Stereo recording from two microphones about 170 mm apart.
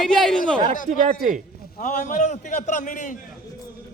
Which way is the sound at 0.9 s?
45° right (ahead or behind).